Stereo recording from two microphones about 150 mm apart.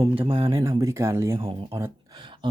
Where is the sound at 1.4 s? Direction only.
35° right (ahead or behind).